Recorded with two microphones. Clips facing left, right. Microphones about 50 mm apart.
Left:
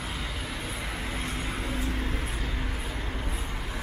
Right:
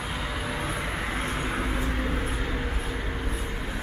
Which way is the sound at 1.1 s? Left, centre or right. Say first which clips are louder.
Right 4 dB; right.